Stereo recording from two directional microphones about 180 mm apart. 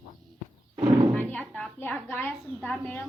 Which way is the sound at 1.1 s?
5° left (ahead or behind).